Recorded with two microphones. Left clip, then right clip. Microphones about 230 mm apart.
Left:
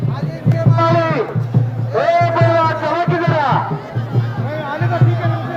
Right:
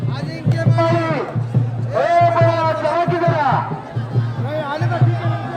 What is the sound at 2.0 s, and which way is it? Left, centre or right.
Music, left.